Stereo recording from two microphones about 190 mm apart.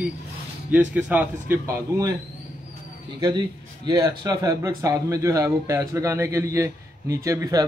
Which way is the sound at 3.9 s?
20° right (ahead or behind).